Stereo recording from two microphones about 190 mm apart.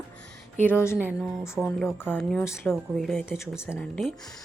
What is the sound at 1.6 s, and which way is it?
Speech, 10° left (ahead or behind).